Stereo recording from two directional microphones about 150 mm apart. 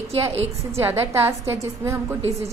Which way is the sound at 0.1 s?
45° right (ahead or behind).